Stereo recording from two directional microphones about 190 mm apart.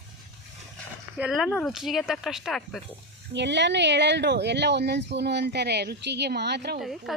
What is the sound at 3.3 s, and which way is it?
A woman's voice, 65° right (ahead or behind).